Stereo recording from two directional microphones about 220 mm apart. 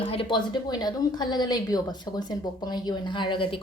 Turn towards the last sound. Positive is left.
turn(degrees=20)  # may be behind; listen again after turning